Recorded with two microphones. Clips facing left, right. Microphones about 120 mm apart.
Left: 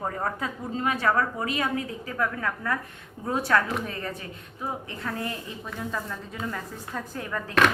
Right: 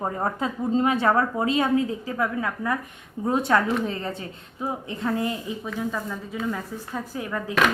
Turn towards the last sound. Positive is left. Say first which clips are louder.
# even
turn(degrees=-5)  # may be behind; listen again after turning